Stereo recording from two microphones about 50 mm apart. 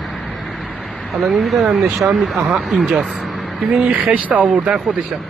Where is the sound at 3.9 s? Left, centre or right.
Right.